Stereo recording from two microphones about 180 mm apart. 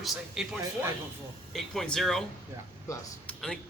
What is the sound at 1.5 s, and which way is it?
Speech, centre (ahead or behind).